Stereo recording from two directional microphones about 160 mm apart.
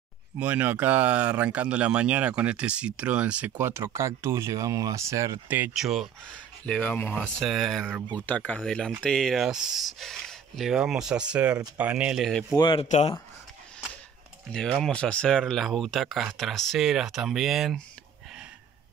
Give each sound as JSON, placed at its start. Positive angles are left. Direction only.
{"t": 0.4, "sound": "speech", "side_deg": -10}
{"t": 6.6, "sound": "speech", "side_deg": 5}
{"t": 12.5, "sound": "speech", "side_deg": 30}
{"t": 12.8, "sound": "speech", "side_deg": 45}
{"t": 14.5, "sound": "speech", "side_deg": 5}